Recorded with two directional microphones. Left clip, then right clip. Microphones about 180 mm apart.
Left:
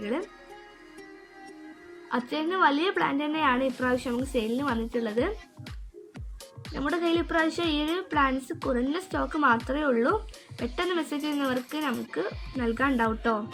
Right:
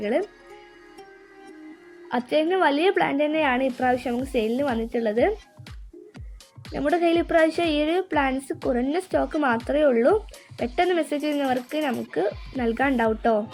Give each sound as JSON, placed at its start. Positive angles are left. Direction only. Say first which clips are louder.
{"t": 0.0, "sound": "a woman's voice", "louder": "right 7 dB", "side_deg": -10}
{"t": 2.0, "sound": "a woman's voice", "louder": "right 7 dB", "side_deg": -15}
{"t": 6.7, "sound": "a woman's voice", "louder": "right 6 dB", "side_deg": -20}